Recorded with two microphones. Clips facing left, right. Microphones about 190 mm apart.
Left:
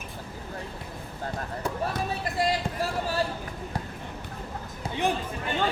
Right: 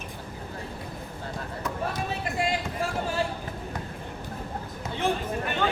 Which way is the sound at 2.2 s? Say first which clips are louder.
Left 2 dB; 35° left (ahead or behind).